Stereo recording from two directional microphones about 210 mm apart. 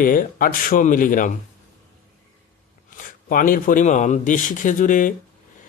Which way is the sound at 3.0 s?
40° left (ahead or behind).